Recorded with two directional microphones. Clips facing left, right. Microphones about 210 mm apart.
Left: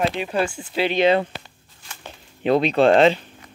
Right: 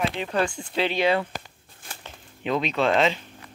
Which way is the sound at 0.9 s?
20° left (ahead or behind).